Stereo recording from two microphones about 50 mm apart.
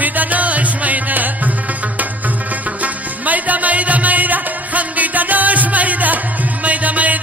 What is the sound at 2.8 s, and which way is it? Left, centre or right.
Music, right.